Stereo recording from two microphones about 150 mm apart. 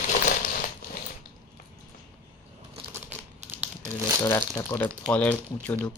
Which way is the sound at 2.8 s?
35° right (ahead or behind).